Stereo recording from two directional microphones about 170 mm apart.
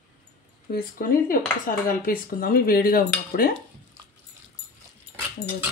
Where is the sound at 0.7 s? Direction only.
55° left (ahead or behind).